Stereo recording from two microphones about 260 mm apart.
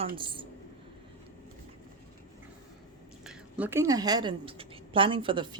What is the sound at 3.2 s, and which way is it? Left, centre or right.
A woman's voice, centre.